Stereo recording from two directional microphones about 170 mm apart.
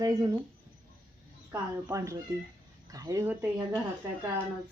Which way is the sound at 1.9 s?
20° right (ahead or behind).